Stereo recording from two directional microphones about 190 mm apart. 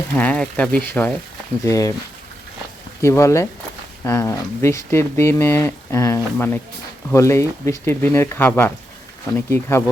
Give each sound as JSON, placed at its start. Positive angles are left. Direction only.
{"t": 0.1, "sound": "speech", "side_deg": 5}
{"t": 3.0, "sound": "speech", "side_deg": 15}